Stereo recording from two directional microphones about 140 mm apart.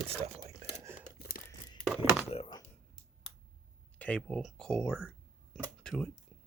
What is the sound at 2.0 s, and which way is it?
Speech, 15° right (ahead or behind).